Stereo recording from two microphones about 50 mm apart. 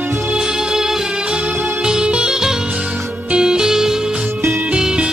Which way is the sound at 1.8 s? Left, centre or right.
Centre.